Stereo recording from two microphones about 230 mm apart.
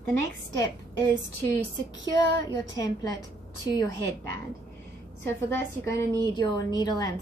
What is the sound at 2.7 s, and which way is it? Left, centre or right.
Speech, centre.